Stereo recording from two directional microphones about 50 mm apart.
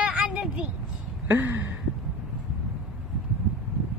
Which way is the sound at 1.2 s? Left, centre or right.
Right.